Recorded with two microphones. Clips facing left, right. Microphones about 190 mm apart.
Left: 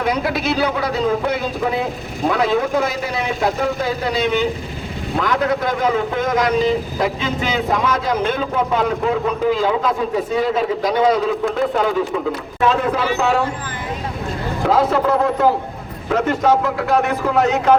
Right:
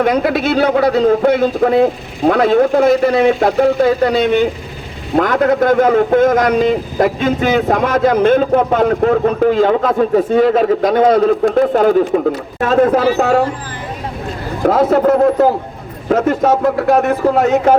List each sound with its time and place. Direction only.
0.0 s a man's voice: 55° right (ahead or behind)
14.6 s a man's voice: 50° right (ahead or behind)